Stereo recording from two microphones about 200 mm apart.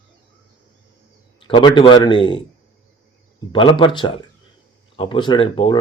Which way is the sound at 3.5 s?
25° left (ahead or behind).